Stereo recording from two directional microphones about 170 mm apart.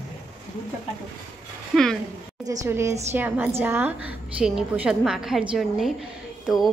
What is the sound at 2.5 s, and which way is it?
A woman's voice, 20° right (ahead or behind).